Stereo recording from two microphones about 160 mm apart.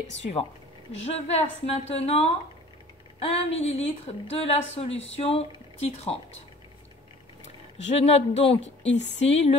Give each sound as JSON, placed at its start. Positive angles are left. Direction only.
{"t": 0.9, "sound": "a woman's voice", "side_deg": 40}
{"t": 7.4, "sound": "a woman's voice", "side_deg": 40}